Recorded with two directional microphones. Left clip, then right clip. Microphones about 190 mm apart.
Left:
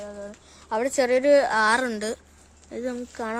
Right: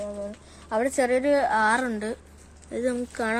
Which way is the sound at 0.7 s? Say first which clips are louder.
Left 1 dB; 40° left (ahead or behind).